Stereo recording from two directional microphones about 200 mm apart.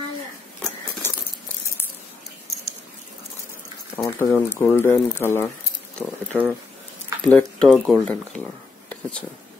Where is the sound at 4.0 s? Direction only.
15° left (ahead or behind).